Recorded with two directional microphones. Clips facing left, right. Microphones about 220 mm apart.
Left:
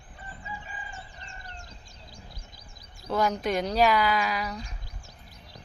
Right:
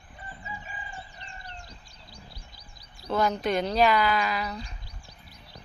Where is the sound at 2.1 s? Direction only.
45° left (ahead or behind).